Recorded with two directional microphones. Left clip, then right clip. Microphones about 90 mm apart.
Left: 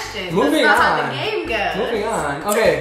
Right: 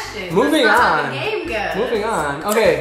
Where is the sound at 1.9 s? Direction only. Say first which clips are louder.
Right 1 dB; 20° right (ahead or behind).